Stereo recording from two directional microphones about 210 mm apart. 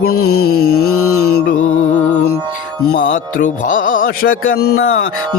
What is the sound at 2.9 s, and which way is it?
Speech, 60° left (ahead or behind).